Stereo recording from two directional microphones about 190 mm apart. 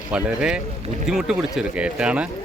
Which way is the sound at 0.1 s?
5° right (ahead or behind).